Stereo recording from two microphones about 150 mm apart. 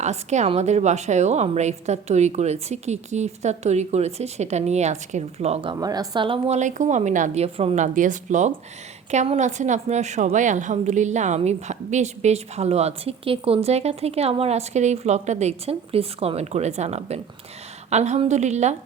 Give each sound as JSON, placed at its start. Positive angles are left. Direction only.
{"t": 0.0, "sound": "a woman's voice", "side_deg": -50}
{"t": 5.7, "sound": "a woman's voice", "side_deg": -25}
{"t": 6.6, "sound": "a woman's voice", "side_deg": -55}
{"t": 7.9, "sound": "a woman's voice", "side_deg": -55}